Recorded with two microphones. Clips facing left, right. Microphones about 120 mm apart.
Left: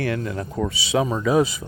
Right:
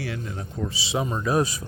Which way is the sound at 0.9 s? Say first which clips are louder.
Left 6 dB; 90° left.